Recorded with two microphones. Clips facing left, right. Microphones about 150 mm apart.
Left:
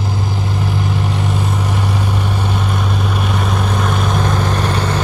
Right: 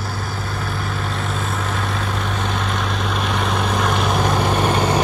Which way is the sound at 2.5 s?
5° left (ahead or behind).